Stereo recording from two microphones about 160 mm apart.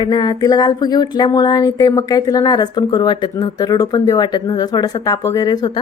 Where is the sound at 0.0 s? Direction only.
25° left (ahead or behind).